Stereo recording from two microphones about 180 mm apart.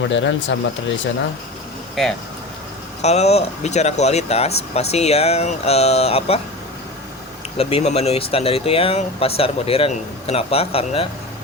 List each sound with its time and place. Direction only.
0.1 s speech: 90° left
2.0 s speech: centre (ahead or behind)
3.0 s speech: 35° left (ahead or behind)
7.6 s speech: 35° left (ahead or behind)